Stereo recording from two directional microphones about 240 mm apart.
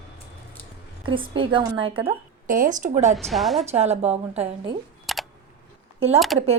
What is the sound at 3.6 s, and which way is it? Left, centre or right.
A woman's voice, right.